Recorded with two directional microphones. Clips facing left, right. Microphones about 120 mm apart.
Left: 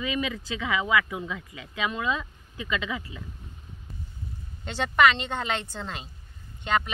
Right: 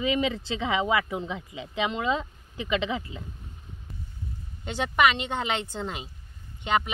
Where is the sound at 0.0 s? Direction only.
25° right (ahead or behind).